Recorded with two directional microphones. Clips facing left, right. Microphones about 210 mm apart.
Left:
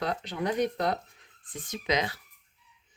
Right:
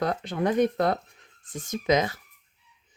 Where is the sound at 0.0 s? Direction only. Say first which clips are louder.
Right 5 dB; 50° right (ahead or behind).